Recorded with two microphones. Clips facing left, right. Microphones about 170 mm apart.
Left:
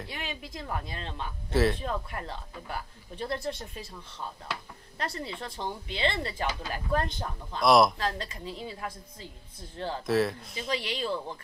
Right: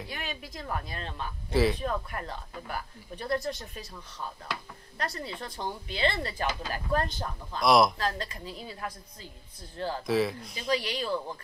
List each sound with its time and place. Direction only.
0.1 s speech: 25° left (ahead or behind)
1.5 s speech: centre (ahead or behind)
1.8 s speech: 20° left (ahead or behind)
4.9 s speech: 25° left (ahead or behind)
7.6 s speech: centre (ahead or behind)
8.0 s speech: 20° left (ahead or behind)
10.0 s speech: centre (ahead or behind)
10.7 s speech: 25° left (ahead or behind)